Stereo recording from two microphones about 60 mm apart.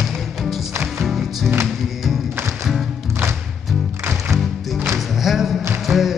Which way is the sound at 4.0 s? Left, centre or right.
Right.